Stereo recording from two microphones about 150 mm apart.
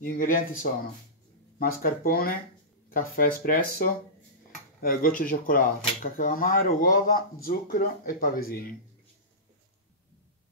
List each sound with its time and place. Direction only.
0.0 s speech: 65° left (ahead or behind)
1.6 s speech: 75° left (ahead or behind)